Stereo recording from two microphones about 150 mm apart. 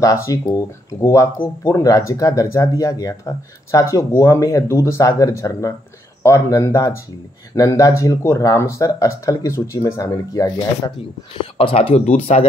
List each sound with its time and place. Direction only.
0.0 s speech: 20° left (ahead or behind)
11.5 s speech: 35° left (ahead or behind)